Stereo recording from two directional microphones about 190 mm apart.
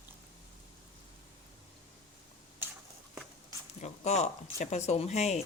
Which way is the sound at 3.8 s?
35° left (ahead or behind).